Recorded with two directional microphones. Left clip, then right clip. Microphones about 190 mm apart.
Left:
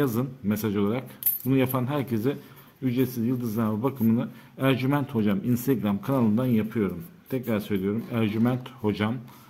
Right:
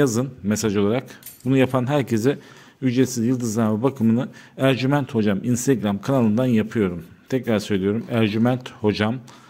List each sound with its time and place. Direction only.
0.0 s speech: 30° right (ahead or behind)